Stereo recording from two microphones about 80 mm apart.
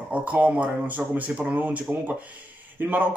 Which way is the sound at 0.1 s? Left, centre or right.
Centre.